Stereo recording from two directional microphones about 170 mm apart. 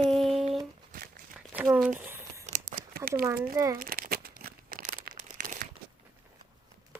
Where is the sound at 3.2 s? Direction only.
15° right (ahead or behind).